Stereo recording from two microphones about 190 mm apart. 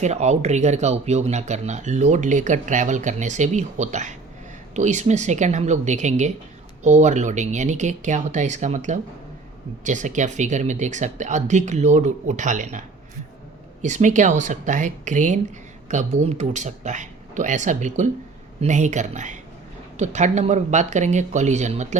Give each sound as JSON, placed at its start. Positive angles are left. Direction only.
{"t": 0.0, "sound": "speech", "side_deg": -35}
{"t": 13.8, "sound": "speech", "side_deg": -40}